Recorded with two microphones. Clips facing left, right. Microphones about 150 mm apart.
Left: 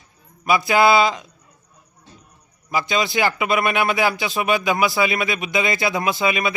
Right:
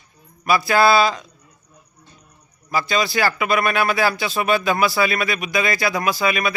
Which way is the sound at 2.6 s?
20° left (ahead or behind).